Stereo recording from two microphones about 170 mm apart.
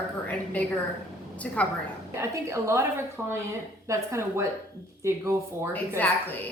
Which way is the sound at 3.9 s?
15° right (ahead or behind).